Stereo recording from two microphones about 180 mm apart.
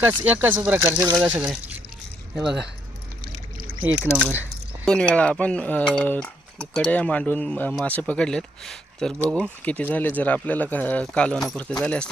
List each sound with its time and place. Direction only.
0.0 s speech: 10° right (ahead or behind)
1.1 s speech: 5° right (ahead or behind)
4.0 s speech: 5° right (ahead or behind)
4.9 s speech: 5° left (ahead or behind)